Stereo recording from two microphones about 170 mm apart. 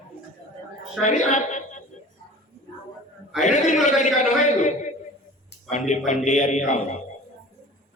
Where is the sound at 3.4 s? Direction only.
45° left (ahead or behind).